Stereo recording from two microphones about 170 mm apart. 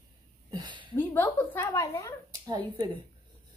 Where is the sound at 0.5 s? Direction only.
25° right (ahead or behind).